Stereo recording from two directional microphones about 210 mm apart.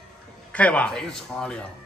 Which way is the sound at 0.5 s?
5° left (ahead or behind).